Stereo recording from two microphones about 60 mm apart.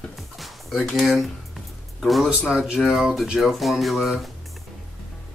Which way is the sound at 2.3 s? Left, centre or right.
Centre.